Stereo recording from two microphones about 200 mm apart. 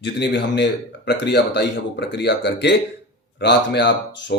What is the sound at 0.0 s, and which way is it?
Speech, 60° left (ahead or behind).